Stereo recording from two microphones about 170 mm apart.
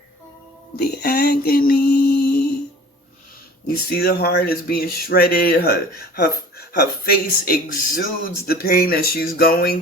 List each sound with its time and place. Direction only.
0.8 s mantra: 65° left (ahead or behind)
3.7 s speech: 65° left (ahead or behind)
7.0 s speech: 55° left (ahead or behind)